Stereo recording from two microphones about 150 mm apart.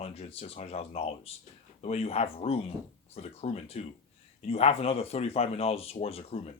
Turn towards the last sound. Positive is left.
turn(degrees=40)  # may be behind; listen again after turning